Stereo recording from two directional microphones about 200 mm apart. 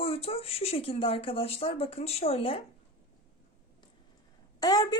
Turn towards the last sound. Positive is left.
turn(degrees=20)  # may be behind; listen again after turning